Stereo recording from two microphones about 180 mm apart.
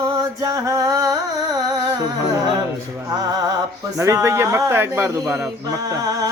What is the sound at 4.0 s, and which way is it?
A woman's voice, 15° right (ahead or behind).